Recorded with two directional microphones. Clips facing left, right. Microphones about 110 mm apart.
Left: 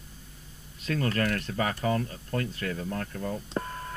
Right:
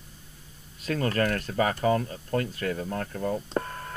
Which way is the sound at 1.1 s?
35° right (ahead or behind).